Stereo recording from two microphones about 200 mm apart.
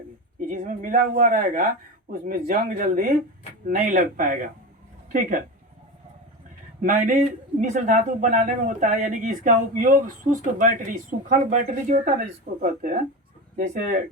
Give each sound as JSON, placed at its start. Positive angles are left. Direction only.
{"t": 0.3, "sound": "speech", "side_deg": -45}
{"t": 6.8, "sound": "speech", "side_deg": -40}